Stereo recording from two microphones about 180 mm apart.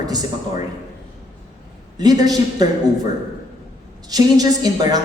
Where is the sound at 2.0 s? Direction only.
20° right (ahead or behind).